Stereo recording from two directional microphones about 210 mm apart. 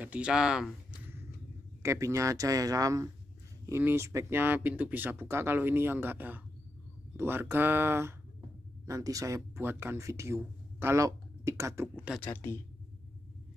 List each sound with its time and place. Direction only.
0.0 s speech: 5° right (ahead or behind)
11.9 s speech: centre (ahead or behind)
12.3 s a woman's voice: 10° left (ahead or behind)